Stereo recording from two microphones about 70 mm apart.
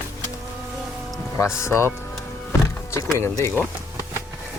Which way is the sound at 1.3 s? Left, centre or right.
Left.